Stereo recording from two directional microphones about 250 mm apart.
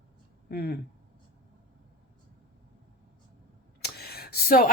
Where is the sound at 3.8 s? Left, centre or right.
Left.